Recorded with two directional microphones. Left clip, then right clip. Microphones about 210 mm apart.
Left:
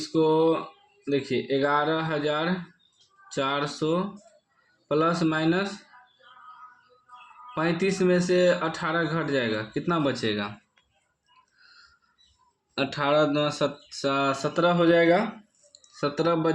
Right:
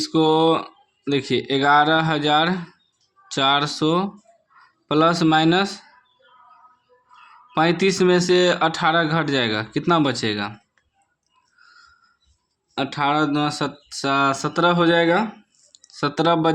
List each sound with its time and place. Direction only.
0.0 s speech: 45° right (ahead or behind)
7.5 s speech: 45° right (ahead or behind)
12.7 s speech: 25° right (ahead or behind)